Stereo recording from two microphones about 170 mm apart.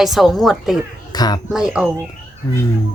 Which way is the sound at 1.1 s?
25° left (ahead or behind).